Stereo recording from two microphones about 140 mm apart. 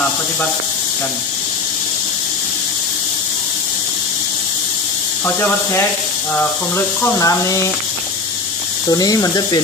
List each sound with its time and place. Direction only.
5.2 s speech: 15° left (ahead or behind)
7.0 s speech: 25° left (ahead or behind)
8.9 s speech: 25° left (ahead or behind)